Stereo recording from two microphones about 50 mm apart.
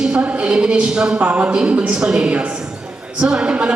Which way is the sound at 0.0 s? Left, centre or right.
Right.